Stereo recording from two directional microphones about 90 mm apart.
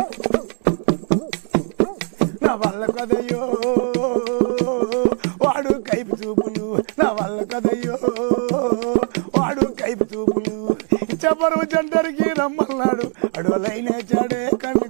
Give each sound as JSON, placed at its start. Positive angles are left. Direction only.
{"t": 0.8, "sound": "horse", "side_deg": -15}
{"t": 2.1, "sound": "music", "side_deg": -15}